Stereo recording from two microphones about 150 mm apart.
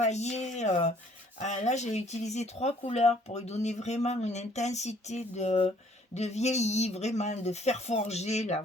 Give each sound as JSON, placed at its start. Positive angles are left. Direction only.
{"t": 0.0, "sound": "speech", "side_deg": 50}